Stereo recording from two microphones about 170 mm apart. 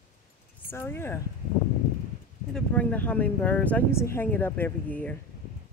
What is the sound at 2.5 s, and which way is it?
Speech, 10° left (ahead or behind).